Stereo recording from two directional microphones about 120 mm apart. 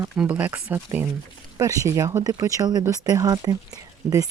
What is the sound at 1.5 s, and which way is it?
Speech, 25° right (ahead or behind).